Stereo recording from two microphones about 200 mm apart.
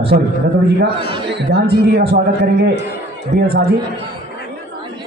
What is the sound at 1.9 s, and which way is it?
A man's voice, 50° right (ahead or behind).